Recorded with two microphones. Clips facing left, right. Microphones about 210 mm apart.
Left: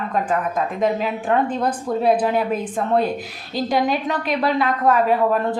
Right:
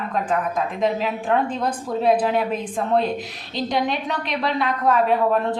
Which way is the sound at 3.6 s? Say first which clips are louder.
Left 3 dB; 5° left (ahead or behind).